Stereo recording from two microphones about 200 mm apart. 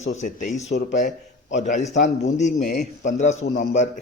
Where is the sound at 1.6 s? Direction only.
35° left (ahead or behind).